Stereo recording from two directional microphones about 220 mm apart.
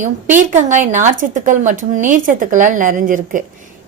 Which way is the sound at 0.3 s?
35° right (ahead or behind).